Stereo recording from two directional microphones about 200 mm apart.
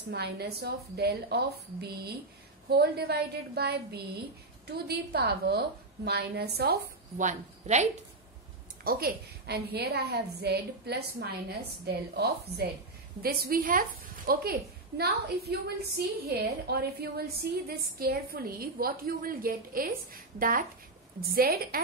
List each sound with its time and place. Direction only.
0.1 s a woman's voice: 55° right (ahead or behind); by 7.9 s 35° right (ahead or behind)
8.8 s a woman's voice: 50° right (ahead or behind)